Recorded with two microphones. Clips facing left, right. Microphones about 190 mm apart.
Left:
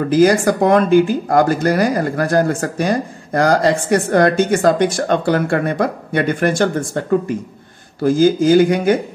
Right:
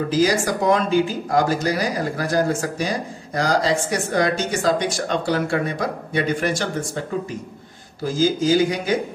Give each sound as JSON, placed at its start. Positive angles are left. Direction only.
{"t": 0.1, "sound": "speech", "side_deg": 55}